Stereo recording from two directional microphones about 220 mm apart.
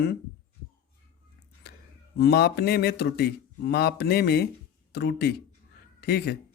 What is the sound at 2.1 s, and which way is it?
Speech, 45° left (ahead or behind).